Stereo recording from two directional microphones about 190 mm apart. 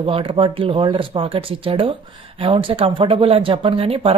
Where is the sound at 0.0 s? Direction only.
30° right (ahead or behind).